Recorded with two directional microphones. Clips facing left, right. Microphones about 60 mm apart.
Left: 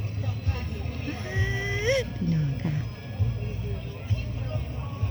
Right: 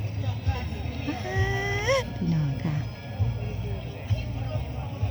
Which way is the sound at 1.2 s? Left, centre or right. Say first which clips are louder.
Right 2 dB; left.